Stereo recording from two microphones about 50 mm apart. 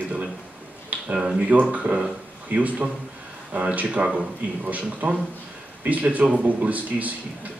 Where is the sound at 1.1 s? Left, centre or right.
Centre.